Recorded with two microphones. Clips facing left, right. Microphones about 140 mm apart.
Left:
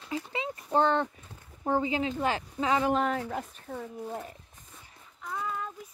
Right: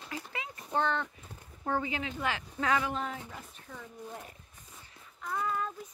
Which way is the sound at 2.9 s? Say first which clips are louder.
Left 9 dB; 70° left (ahead or behind).